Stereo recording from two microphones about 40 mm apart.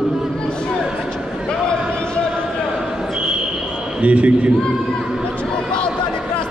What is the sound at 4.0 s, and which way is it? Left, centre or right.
Speech, right.